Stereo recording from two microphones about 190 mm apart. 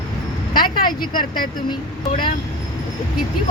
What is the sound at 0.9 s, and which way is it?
Speech, 25° left (ahead or behind).